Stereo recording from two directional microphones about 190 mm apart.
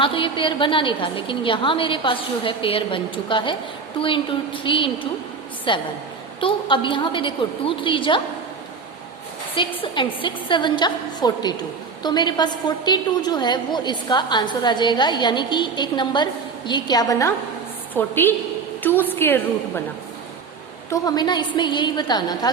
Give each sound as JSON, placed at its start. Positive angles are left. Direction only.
{"t": 0.0, "sound": "a woman's voice", "side_deg": 25}
{"t": 9.6, "sound": "a woman's voice", "side_deg": 25}
{"t": 20.9, "sound": "a woman's voice", "side_deg": 20}